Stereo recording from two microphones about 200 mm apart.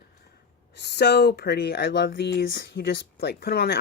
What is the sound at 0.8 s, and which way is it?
Speech, 55° left (ahead or behind).